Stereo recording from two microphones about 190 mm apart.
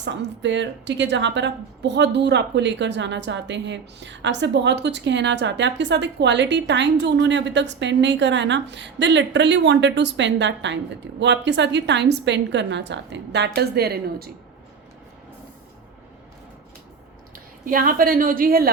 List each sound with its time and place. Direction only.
0.0 s a woman's voice: 70° right (ahead or behind)
17.3 s a woman's voice: 45° right (ahead or behind)